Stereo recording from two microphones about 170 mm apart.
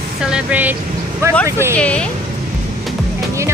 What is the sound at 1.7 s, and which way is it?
Speech, 5° left (ahead or behind).